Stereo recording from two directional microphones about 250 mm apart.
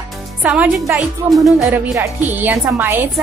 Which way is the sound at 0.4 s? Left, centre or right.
Centre.